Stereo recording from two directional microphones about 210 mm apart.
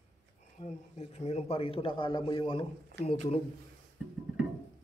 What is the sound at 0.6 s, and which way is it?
A man's voice, 30° left (ahead or behind).